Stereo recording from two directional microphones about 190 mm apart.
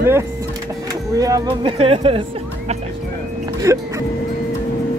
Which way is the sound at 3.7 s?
15° right (ahead or behind).